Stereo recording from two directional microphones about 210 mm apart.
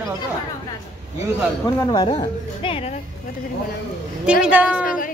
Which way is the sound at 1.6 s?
20° left (ahead or behind).